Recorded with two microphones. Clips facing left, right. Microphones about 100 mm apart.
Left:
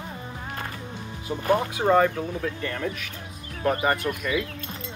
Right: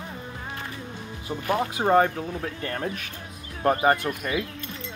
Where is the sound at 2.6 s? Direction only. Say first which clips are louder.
Even; 40° right (ahead or behind).